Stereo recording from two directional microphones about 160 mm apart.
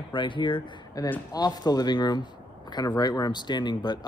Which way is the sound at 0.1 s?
30° left (ahead or behind).